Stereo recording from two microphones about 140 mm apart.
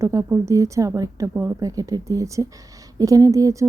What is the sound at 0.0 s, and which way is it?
Speech, 20° right (ahead or behind).